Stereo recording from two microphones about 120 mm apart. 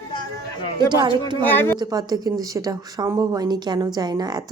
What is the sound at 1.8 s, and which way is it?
Speech, 30° right (ahead or behind).